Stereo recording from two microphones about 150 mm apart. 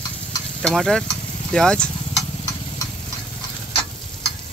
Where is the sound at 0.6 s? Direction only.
5° left (ahead or behind).